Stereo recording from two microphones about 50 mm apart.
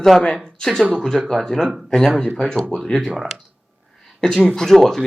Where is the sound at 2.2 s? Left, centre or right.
Centre.